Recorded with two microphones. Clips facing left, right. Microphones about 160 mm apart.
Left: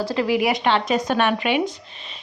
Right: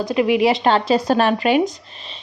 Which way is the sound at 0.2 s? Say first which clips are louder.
Right 5 dB; 20° right (ahead or behind).